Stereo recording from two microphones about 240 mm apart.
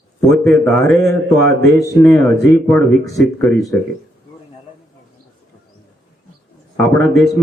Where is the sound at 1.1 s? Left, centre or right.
Right.